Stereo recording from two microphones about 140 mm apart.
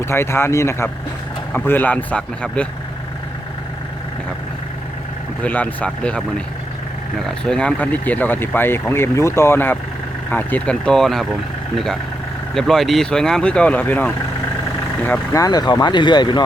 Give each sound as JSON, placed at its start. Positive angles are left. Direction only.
{"t": 0.0, "sound": "speech", "side_deg": 20}
{"t": 5.4, "sound": "speech", "side_deg": 10}
{"t": 7.4, "sound": "speech", "side_deg": 5}
{"t": 12.5, "sound": "speech", "side_deg": 0}